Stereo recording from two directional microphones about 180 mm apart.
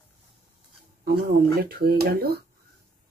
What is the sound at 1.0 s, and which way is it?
Speech, 55° right (ahead or behind).